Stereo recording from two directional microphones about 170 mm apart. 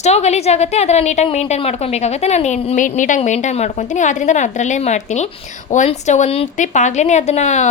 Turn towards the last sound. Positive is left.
turn(degrees=45)  # may be behind; listen again after turning